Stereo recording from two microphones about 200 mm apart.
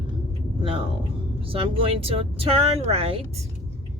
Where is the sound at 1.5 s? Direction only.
25° right (ahead or behind).